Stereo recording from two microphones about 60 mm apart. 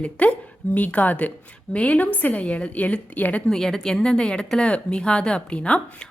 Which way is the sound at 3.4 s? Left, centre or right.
Centre.